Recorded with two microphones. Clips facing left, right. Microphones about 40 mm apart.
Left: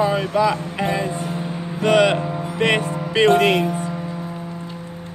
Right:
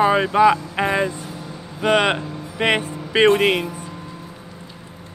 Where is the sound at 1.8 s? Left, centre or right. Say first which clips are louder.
Left 2 dB; centre.